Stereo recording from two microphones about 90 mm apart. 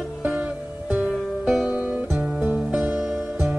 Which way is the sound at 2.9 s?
5° right (ahead or behind).